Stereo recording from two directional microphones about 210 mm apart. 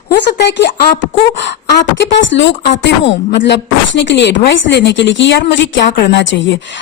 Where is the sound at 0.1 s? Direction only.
55° left (ahead or behind).